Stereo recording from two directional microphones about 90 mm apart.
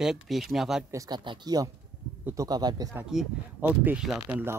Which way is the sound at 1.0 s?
55° right (ahead or behind).